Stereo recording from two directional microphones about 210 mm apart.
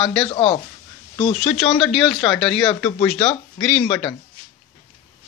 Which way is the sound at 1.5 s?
Centre (ahead or behind).